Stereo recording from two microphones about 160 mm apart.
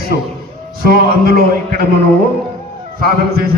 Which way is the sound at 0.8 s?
75° right (ahead or behind).